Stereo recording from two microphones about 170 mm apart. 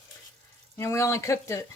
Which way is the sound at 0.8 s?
15° left (ahead or behind).